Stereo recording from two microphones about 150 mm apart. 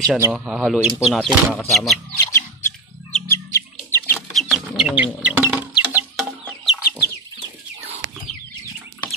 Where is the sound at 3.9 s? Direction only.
15° left (ahead or behind).